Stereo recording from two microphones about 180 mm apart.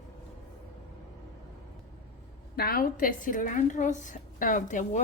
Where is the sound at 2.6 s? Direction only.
55° left (ahead or behind).